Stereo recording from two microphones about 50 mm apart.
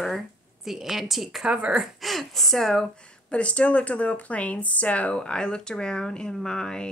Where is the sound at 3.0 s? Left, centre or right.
Left.